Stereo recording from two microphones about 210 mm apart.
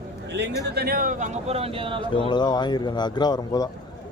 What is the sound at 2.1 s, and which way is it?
Speech, 20° left (ahead or behind).